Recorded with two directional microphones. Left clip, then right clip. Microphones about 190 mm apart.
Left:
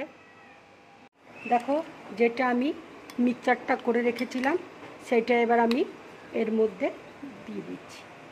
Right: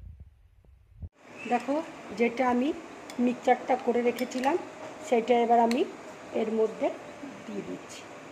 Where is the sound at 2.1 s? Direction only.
30° left (ahead or behind).